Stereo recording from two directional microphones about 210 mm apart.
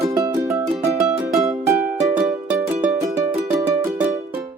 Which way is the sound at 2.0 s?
10° right (ahead or behind).